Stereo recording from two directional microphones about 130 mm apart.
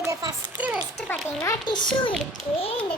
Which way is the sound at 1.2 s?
20° left (ahead or behind).